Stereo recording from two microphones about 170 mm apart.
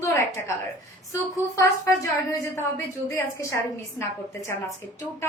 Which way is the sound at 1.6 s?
15° left (ahead or behind).